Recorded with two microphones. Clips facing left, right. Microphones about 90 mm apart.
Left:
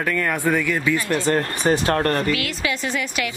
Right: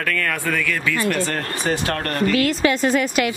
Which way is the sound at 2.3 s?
40° right (ahead or behind).